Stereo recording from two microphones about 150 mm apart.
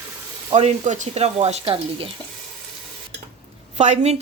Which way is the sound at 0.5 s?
50° right (ahead or behind).